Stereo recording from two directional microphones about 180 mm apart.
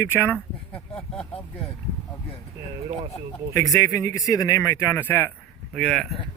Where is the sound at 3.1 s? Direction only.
20° left (ahead or behind); by 6.2 s centre (ahead or behind).